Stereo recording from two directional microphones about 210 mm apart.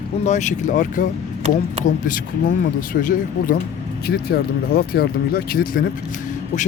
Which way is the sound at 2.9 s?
40° left (ahead or behind).